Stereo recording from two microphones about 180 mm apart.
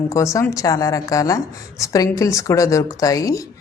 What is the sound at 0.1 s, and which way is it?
A woman's voice, 15° left (ahead or behind).